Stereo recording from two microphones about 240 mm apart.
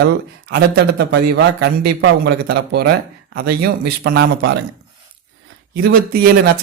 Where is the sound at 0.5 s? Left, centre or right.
Right.